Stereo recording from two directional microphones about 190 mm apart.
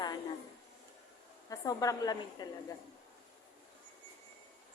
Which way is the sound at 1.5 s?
20° left (ahead or behind).